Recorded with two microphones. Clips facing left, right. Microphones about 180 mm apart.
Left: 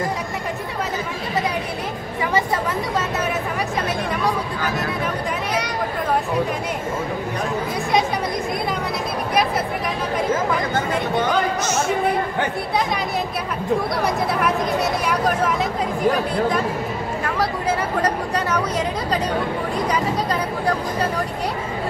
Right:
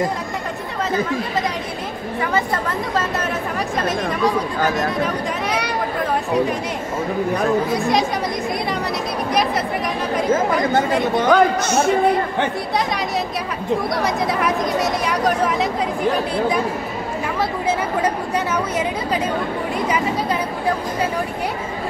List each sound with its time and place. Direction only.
11.2 s speech: 60° right (ahead or behind)
17.6 s speech: 10° right (ahead or behind)